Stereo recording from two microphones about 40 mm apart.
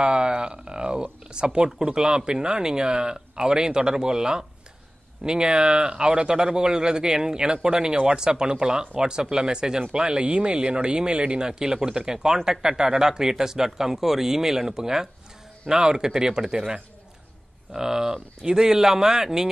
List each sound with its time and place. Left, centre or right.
0.0 s speech: right